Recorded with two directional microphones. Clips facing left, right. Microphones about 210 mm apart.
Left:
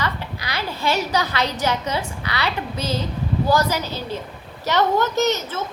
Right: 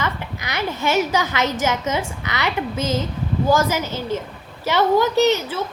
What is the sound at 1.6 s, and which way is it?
Speech, 20° right (ahead or behind).